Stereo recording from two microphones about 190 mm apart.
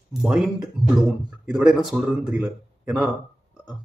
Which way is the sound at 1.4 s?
5° right (ahead or behind).